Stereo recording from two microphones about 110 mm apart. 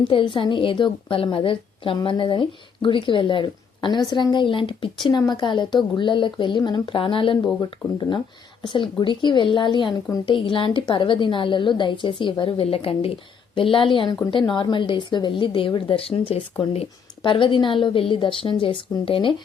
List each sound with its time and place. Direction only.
0.0 s speech: 50° left (ahead or behind)